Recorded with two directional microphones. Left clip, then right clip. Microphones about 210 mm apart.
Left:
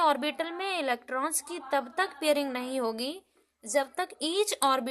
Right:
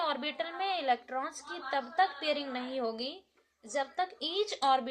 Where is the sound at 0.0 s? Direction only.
45° left (ahead or behind).